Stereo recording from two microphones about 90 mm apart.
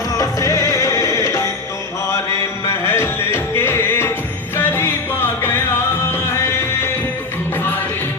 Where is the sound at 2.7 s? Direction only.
30° left (ahead or behind).